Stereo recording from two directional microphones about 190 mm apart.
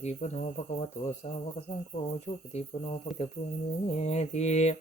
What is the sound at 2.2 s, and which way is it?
Mantra, 35° left (ahead or behind).